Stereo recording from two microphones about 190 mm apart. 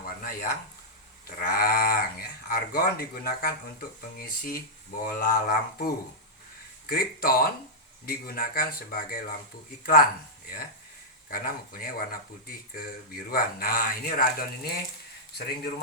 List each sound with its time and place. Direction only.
0.0 s a sound: 50° left (ahead or behind)
1.4 s speech: 50° left (ahead or behind)
11.3 s speech: 50° left (ahead or behind)